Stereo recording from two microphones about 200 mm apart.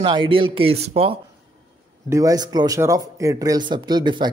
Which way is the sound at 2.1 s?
15° right (ahead or behind).